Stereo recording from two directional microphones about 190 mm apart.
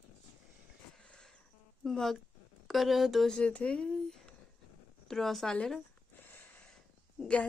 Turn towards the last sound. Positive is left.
turn(degrees=5)  # may be behind; listen again after turning